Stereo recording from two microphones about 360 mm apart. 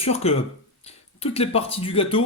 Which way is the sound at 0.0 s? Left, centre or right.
Centre.